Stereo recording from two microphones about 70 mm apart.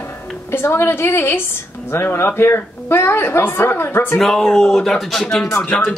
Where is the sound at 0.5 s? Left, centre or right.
Left.